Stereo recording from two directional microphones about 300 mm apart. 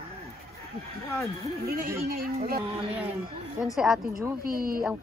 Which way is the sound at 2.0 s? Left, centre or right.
Right.